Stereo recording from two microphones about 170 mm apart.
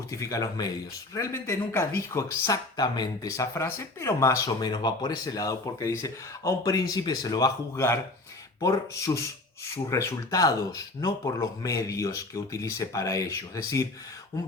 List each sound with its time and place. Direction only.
0.1 s speech: 20° left (ahead or behind)